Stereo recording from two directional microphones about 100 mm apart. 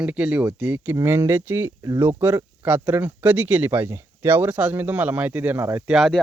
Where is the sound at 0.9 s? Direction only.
25° right (ahead or behind).